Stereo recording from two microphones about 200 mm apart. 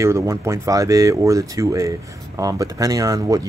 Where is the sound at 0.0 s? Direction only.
15° right (ahead or behind).